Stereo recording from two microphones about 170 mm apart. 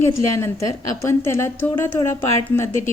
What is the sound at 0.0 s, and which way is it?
Speech, 15° left (ahead or behind).